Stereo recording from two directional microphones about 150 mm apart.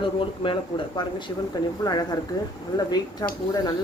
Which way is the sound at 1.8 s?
25° left (ahead or behind).